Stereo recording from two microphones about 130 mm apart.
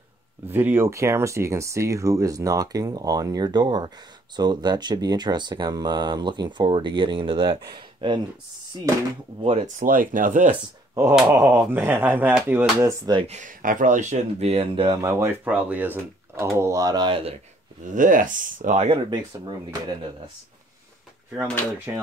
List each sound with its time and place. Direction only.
0.5 s speech: 15° right (ahead or behind); by 8.2 s 40° right (ahead or behind)
9.4 s speech: 50° right (ahead or behind); by 10.5 s 90° right
11.1 s speech: 15° right (ahead or behind)
12.8 s speech: 30° right (ahead or behind)
13.3 s speech: 80° right; by 15.0 s 45° right (ahead or behind)
15.0 s speech: 20° right (ahead or behind)
17.9 s speech: 90° right
18.9 s speech: 40° right (ahead or behind)